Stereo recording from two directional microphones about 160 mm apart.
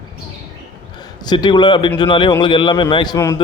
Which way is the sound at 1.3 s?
30° left (ahead or behind).